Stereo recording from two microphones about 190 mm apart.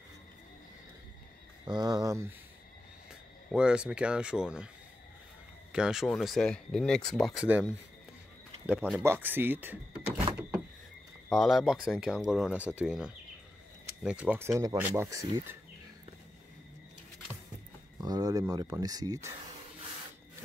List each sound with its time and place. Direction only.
1.7 s speech: 20° right (ahead or behind)
3.5 s speech: 5° right (ahead or behind)
5.7 s speech: 5° right (ahead or behind)
7.4 s speech: 5° right (ahead or behind)
11.2 s speech: centre (ahead or behind); by 15.5 s 15° right (ahead or behind)
18.0 s speech: 20° right (ahead or behind)